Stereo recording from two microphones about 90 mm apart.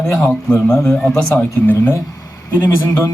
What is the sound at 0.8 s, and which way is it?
Speech, 10° left (ahead or behind).